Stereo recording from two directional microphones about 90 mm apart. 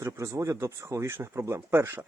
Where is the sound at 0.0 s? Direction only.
35° right (ahead or behind).